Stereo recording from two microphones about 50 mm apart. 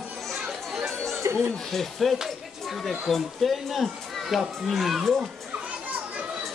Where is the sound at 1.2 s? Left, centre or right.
Right.